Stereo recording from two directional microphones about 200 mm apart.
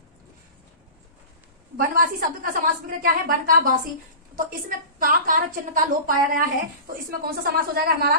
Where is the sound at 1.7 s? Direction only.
45° right (ahead or behind).